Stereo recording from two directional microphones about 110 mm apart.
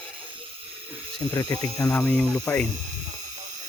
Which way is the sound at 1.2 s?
30° left (ahead or behind).